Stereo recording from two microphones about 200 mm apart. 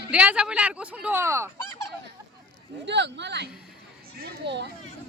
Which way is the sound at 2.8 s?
60° right (ahead or behind).